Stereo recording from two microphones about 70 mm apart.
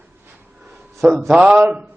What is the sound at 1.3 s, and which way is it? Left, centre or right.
Speech, centre.